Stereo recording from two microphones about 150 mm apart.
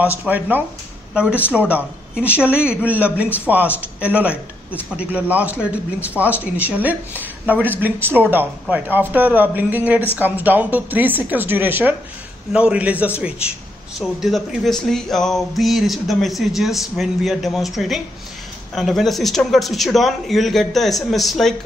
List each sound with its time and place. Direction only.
0.0 s speech: 10° right (ahead or behind)